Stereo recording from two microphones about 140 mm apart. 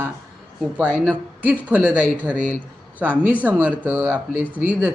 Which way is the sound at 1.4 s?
10° right (ahead or behind).